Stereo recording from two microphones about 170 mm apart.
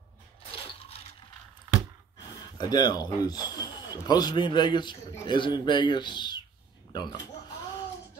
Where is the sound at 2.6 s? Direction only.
25° left (ahead or behind).